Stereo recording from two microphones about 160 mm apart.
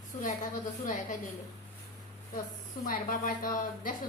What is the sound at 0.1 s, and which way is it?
Speech, 50° left (ahead or behind).